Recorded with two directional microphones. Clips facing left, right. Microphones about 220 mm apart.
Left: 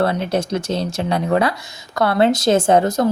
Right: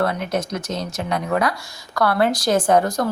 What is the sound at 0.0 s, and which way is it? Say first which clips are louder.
A woman's voice: left 3 dB; 30° left (ahead or behind).